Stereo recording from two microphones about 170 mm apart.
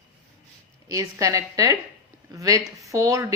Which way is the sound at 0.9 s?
20° right (ahead or behind).